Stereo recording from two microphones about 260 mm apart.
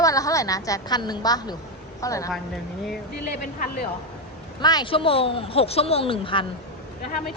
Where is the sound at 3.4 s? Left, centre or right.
Left.